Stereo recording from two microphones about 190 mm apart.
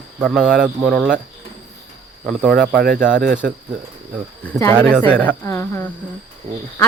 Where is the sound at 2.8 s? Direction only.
50° right (ahead or behind).